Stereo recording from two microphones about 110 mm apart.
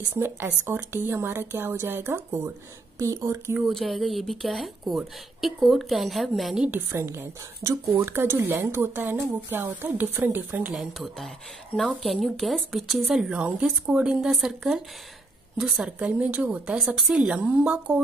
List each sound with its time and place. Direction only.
0.1 s a woman's voice: 20° right (ahead or behind)
3.5 s speech: centre (ahead or behind)
6.7 s a woman's voice: 25° right (ahead or behind)
10.7 s a woman's voice: centre (ahead or behind)